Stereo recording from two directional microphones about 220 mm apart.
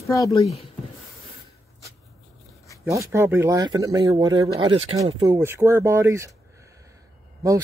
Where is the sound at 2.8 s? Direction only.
10° right (ahead or behind).